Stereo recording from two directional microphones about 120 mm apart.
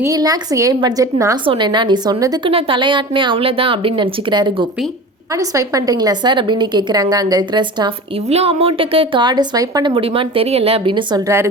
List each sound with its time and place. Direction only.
0.0 s a woman's voice: 30° right (ahead or behind)
1.5 s a woman's voice: 40° right (ahead or behind)
2.1 s a woman's voice: 30° right (ahead or behind)
2.4 s a woman's voice: 50° right (ahead or behind)
5.3 s a woman's voice: 30° right (ahead or behind)
8.3 s a woman's voice: 55° right (ahead or behind); by 9.9 s 35° right (ahead or behind)
9.9 s a woman's voice: 50° right (ahead or behind)
11.2 s a woman's voice: 20° right (ahead or behind)